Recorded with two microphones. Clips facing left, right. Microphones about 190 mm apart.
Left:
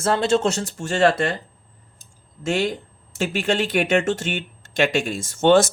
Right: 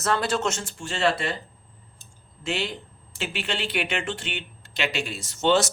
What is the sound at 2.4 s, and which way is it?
Speech, 45° left (ahead or behind).